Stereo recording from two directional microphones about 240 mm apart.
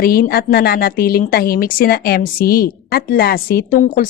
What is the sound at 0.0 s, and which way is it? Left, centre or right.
A woman's voice, left.